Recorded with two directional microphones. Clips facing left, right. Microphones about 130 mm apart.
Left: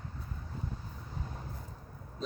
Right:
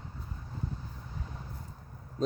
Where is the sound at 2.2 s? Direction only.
45° right (ahead or behind).